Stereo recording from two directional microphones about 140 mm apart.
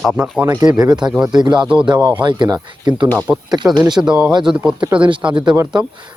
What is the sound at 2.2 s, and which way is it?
Speech, 35° right (ahead or behind).